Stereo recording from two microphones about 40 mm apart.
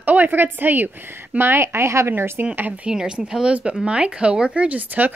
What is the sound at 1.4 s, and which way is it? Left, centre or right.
Speech, right.